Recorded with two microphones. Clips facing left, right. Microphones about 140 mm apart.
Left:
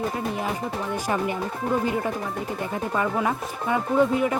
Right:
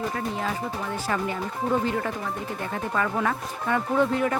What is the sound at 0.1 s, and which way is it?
Speech, 15° left (ahead or behind).